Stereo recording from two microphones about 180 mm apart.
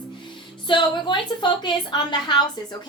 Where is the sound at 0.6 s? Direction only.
25° left (ahead or behind).